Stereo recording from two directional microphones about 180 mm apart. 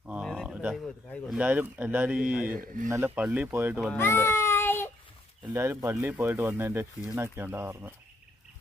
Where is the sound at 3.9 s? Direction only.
15° left (ahead or behind).